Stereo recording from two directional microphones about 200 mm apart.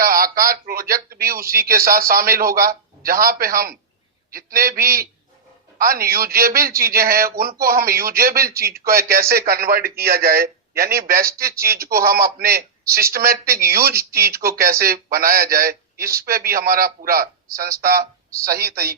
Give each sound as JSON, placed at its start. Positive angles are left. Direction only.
{"t": 0.0, "sound": "a man's voice", "side_deg": -45}